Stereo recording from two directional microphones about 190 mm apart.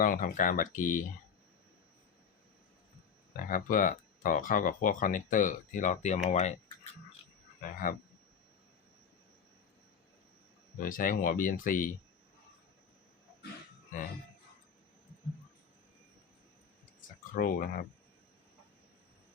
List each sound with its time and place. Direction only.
0.0 s speech: 45° left (ahead or behind)
3.3 s speech: 45° left (ahead or behind)
7.6 s speech: 50° left (ahead or behind)
10.8 s speech: 45° left (ahead or behind)
17.3 s speech: 50° left (ahead or behind)